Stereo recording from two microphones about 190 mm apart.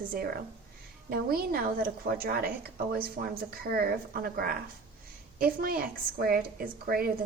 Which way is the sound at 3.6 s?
55° right (ahead or behind).